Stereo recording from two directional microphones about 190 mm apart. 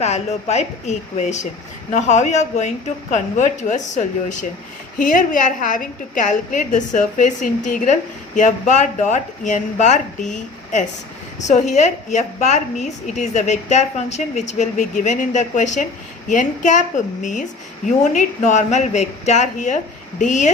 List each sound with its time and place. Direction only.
0.0 s a woman's voice: 35° left (ahead or behind)
17.8 s a woman's voice: 40° left (ahead or behind)